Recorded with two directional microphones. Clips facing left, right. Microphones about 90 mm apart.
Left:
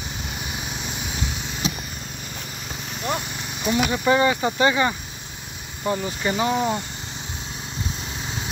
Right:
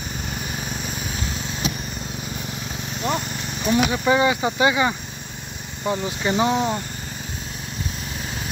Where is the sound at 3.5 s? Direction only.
15° left (ahead or behind).